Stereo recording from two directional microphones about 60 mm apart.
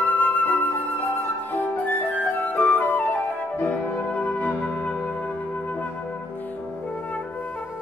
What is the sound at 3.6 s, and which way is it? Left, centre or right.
Music, left.